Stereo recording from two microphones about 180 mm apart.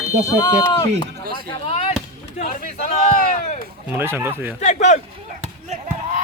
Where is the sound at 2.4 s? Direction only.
40° left (ahead or behind).